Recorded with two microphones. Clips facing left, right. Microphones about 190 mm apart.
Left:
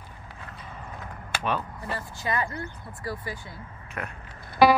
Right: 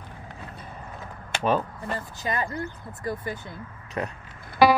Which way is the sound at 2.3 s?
25° right (ahead or behind).